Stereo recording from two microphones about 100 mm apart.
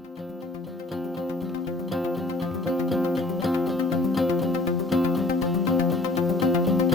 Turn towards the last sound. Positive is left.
turn(degrees=0)  # may be behind; listen again after turning